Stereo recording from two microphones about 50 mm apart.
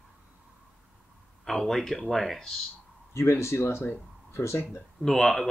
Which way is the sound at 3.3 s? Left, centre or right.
Left.